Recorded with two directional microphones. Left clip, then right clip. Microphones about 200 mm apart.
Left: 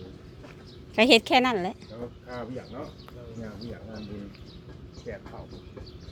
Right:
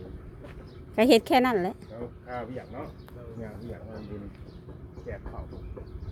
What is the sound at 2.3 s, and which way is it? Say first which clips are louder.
Speech: right 2 dB; 25° left (ahead or behind).